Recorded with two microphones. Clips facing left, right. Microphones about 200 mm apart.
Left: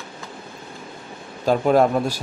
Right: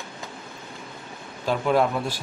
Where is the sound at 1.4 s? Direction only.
45° left (ahead or behind).